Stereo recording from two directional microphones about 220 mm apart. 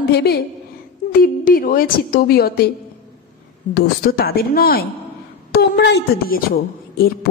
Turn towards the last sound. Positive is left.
turn(degrees=40)  # may be behind; listen again after turning